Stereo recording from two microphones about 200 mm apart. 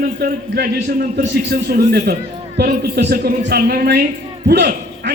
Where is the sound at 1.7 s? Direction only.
50° right (ahead or behind).